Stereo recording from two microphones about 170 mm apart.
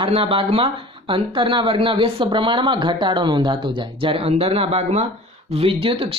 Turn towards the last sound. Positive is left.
turn(degrees=-35)  # may be behind; listen again after turning